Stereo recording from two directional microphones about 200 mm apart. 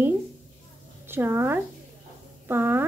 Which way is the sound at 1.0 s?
10° right (ahead or behind).